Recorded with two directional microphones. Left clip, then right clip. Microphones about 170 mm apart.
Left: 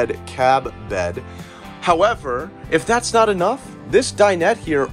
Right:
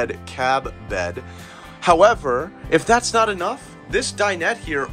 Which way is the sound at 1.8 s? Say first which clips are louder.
Right 2 dB; 25° right (ahead or behind).